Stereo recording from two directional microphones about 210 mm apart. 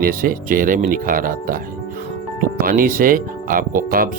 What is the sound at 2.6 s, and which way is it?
Speech, 40° right (ahead or behind).